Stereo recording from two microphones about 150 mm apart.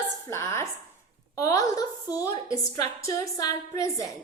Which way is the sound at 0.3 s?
20° left (ahead or behind).